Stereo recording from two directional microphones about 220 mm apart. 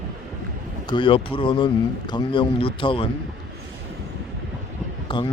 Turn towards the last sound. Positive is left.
turn(degrees=20)  # may be behind; listen again after turning